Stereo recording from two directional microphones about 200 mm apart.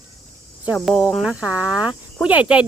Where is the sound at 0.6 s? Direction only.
5° right (ahead or behind).